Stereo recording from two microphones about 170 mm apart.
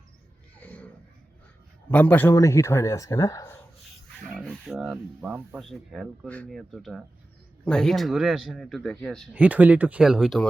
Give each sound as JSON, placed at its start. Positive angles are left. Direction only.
{"t": 0.6, "sound": "a sound", "side_deg": 10}
{"t": 1.9, "sound": "a man's voice", "side_deg": 10}
{"t": 4.4, "sound": "speech", "side_deg": 0}
{"t": 9.3, "sound": "speech", "side_deg": -10}